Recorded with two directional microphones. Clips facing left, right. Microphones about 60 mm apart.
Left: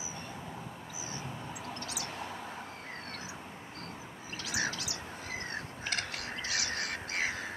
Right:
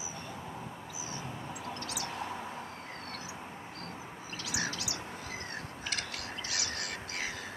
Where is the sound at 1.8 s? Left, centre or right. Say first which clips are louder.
Right 1 dB; centre.